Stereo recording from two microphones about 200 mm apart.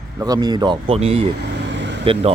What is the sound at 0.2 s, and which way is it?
Speech, 20° right (ahead or behind).